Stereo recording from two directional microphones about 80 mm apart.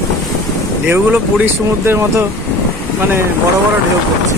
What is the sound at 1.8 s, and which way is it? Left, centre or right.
Speech, right.